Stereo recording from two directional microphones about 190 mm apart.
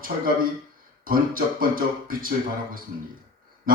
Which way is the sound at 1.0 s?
45° right (ahead or behind).